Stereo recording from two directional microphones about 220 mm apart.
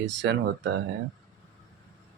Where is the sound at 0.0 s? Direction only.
55° right (ahead or behind).